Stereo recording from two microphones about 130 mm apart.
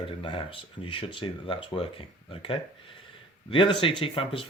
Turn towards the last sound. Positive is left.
turn(degrees=45)  # may be behind; listen again after turning